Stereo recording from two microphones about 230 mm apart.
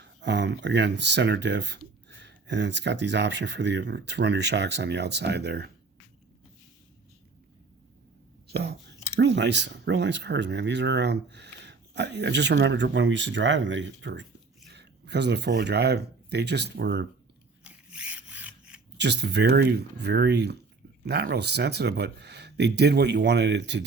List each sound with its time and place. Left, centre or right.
0.0 s speech: right
8.4 s speech: right
17.6 s a sound: centre
18.9 s speech: right